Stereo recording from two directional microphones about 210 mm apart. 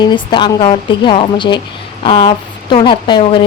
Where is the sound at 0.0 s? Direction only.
20° left (ahead or behind).